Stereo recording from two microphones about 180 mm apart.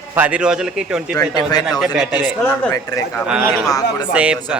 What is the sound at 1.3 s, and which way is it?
Speech, 20° left (ahead or behind).